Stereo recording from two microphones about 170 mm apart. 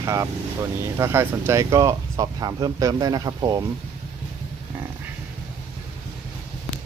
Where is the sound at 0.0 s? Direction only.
20° right (ahead or behind).